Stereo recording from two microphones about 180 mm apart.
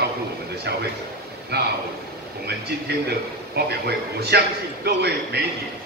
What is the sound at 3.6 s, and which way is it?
Speech, 60° right (ahead or behind).